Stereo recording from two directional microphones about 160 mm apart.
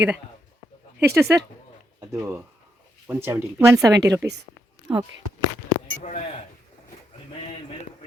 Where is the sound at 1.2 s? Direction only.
20° right (ahead or behind).